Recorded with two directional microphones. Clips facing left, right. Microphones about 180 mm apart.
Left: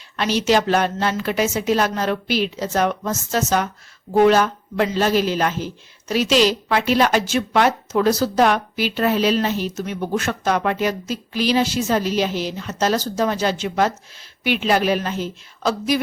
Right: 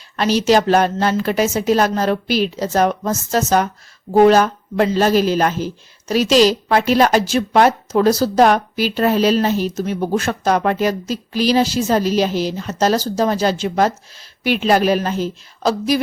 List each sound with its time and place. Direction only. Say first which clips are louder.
0.2 s speech: right 4 dB; 40° right (ahead or behind)